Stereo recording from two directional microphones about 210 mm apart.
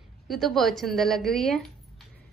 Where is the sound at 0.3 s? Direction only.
Centre (ahead or behind).